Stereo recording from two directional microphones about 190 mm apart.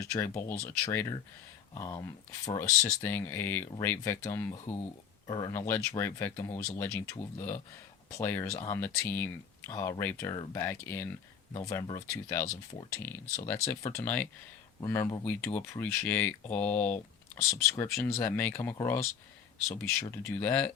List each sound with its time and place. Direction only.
0.0 s speech: 15° left (ahead or behind)